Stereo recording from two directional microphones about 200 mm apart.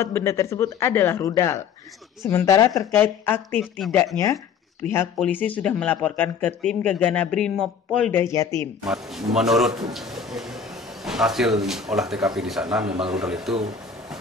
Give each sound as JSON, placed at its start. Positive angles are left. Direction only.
{"t": 0.0, "sound": "speech", "side_deg": 15}
{"t": 8.8, "sound": "speech", "side_deg": 0}